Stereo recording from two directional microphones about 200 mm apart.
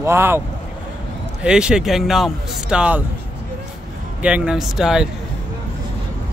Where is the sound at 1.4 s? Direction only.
5° right (ahead or behind).